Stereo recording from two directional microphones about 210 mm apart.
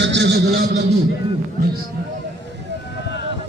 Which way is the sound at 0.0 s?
55° right (ahead or behind).